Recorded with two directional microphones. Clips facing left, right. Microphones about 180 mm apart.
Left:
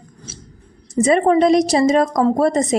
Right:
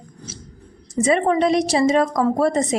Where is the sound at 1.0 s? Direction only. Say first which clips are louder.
Left 4 dB; 40° left (ahead or behind).